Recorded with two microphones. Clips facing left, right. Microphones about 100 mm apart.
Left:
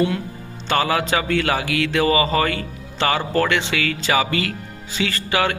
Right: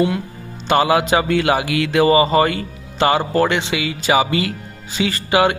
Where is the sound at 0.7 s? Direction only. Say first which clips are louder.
Right 5 dB; 15° right (ahead or behind).